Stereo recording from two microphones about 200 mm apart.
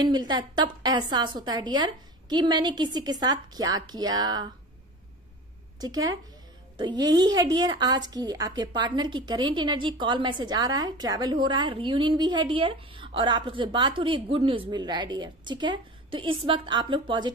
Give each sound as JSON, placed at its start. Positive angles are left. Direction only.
{"t": 0.0, "sound": "a woman's voice", "side_deg": -20}
{"t": 5.8, "sound": "a woman's voice", "side_deg": -20}